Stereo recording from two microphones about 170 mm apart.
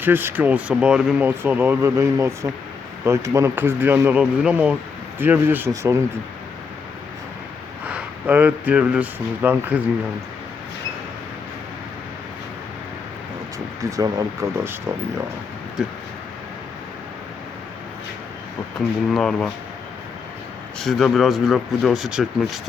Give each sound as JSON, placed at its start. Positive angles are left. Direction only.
{"t": 0.0, "sound": "speech", "side_deg": -15}
{"t": 7.9, "sound": "speech", "side_deg": -10}
{"t": 13.9, "sound": "speech", "side_deg": -20}
{"t": 19.1, "sound": "speech", "side_deg": 5}
{"t": 20.7, "sound": "speech", "side_deg": 0}